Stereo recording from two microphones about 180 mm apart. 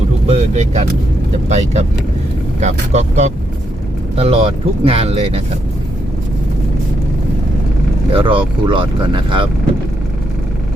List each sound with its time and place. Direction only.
0.3 s speech: 40° right (ahead or behind)
8.1 s speech: 30° right (ahead or behind)